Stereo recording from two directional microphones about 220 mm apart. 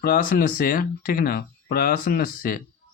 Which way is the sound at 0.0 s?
40° left (ahead or behind).